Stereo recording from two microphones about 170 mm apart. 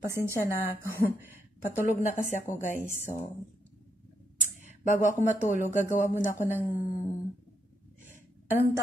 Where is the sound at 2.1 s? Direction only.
50° left (ahead or behind).